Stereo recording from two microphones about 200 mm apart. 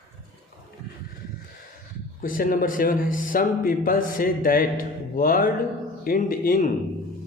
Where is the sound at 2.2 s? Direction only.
45° left (ahead or behind).